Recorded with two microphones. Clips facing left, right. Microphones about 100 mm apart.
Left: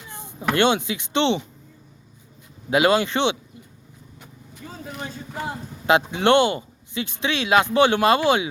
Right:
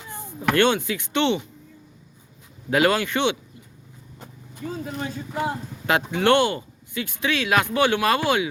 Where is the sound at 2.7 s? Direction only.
20° left (ahead or behind).